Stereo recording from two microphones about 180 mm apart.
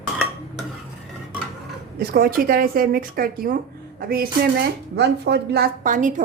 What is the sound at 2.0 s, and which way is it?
Speech, 55° right (ahead or behind).